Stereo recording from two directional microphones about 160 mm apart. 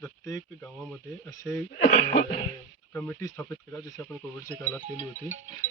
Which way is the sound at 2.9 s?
10° left (ahead or behind).